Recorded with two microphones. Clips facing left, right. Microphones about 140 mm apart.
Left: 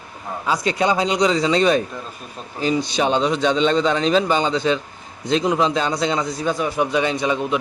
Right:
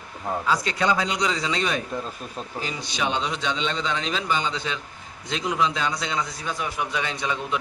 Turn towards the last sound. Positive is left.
turn(degrees=20)  # may be behind; listen again after turning